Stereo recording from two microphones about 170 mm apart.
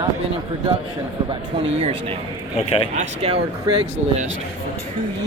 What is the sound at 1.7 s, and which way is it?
Speech, 40° right (ahead or behind).